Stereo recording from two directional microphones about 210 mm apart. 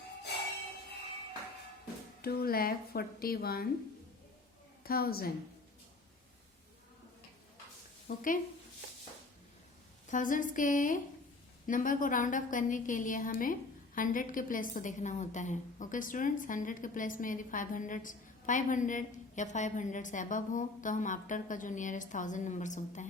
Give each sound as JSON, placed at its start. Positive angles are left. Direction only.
{"t": 2.2, "sound": "a woman's voice", "side_deg": 45}
{"t": 4.8, "sound": "a woman's voice", "side_deg": 45}
{"t": 8.0, "sound": "a woman's voice", "side_deg": 40}
{"t": 10.1, "sound": "a woman's voice", "side_deg": 40}